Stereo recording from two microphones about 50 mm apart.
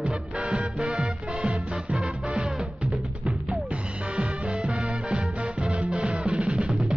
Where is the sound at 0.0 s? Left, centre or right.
Right.